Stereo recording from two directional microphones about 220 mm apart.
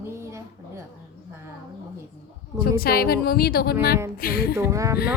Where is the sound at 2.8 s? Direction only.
45° left (ahead or behind).